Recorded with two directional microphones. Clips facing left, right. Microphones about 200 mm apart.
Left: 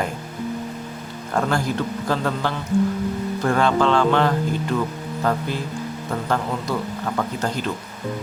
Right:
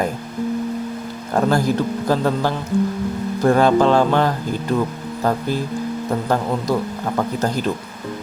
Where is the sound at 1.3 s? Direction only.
35° right (ahead or behind).